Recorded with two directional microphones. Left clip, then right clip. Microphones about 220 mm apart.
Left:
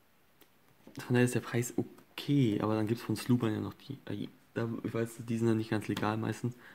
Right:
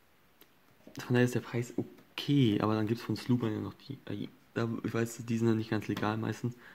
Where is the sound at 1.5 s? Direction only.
20° left (ahead or behind).